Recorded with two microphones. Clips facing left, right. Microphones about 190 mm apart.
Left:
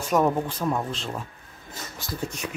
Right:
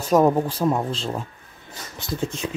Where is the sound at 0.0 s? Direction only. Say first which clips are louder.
Right 5 dB; 35° right (ahead or behind).